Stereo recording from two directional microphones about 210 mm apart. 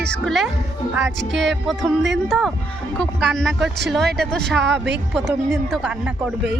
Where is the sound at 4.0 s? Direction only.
50° right (ahead or behind).